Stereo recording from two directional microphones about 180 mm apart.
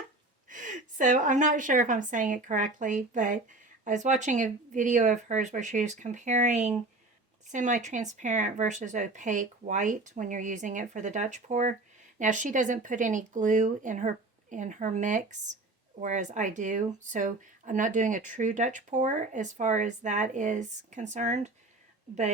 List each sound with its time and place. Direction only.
0.4 s a woman's voice: 45° right (ahead or behind)